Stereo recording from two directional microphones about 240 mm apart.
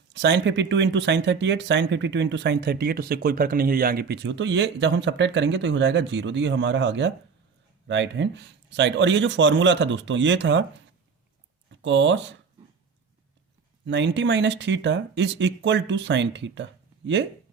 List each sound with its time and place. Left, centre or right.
0.1 s speech: right
11.7 s speech: right
13.8 s speech: right